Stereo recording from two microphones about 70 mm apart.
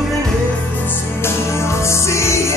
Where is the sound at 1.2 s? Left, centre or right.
Left.